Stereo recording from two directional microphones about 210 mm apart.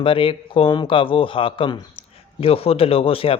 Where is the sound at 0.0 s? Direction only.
25° left (ahead or behind).